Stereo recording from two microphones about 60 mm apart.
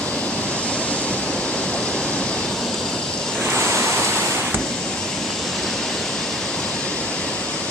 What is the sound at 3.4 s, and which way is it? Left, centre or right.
Waves, right.